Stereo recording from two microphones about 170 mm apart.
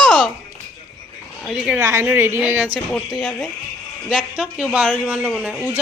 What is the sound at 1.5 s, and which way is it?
Speech, 5° right (ahead or behind).